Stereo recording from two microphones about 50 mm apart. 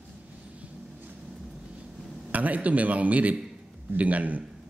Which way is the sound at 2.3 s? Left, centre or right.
Right.